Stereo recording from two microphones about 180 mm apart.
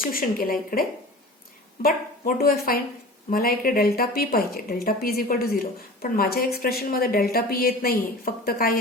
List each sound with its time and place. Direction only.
0.1 s a woman's voice: 55° left (ahead or behind)